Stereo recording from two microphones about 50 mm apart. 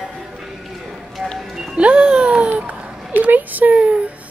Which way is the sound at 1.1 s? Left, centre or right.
Centre.